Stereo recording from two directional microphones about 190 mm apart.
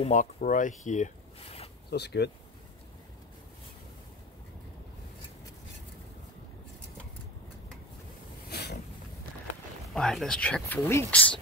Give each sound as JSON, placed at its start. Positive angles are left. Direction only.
{"t": 0.0, "sound": "speech", "side_deg": 40}
{"t": 1.9, "sound": "speech", "side_deg": 60}
{"t": 8.5, "sound": "vehicle", "side_deg": 60}
{"t": 9.9, "sound": "speech", "side_deg": 5}